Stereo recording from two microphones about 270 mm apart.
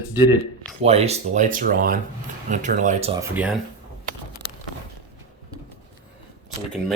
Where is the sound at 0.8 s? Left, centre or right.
Right.